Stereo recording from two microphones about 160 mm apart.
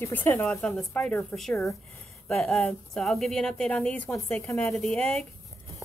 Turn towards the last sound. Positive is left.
turn(degrees=5)  # may be behind; listen again after turning